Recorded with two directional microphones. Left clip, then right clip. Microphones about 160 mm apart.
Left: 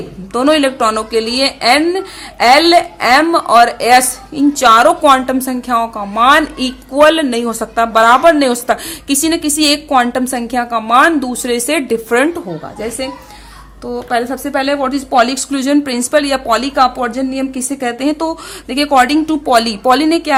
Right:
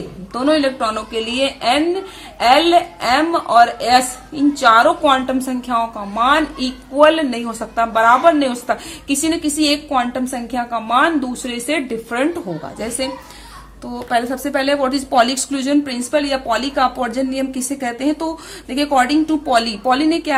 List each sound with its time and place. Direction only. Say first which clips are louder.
0.3 s a woman's voice: left 5 dB; 35° left (ahead or behind)
13.9 s a woman's voice: left 3 dB; 15° left (ahead or behind)